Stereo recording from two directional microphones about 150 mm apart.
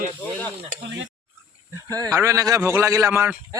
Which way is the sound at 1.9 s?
15° left (ahead or behind).